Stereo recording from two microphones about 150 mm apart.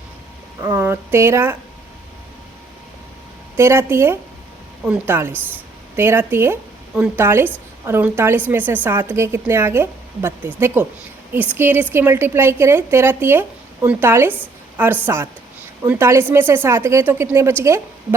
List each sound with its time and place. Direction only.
0.6 s a woman's voice: 15° right (ahead or behind)
3.6 s a woman's voice: 15° right (ahead or behind)